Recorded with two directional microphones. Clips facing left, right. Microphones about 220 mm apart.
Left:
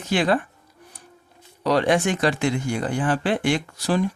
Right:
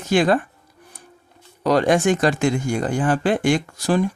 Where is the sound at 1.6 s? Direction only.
45° right (ahead or behind).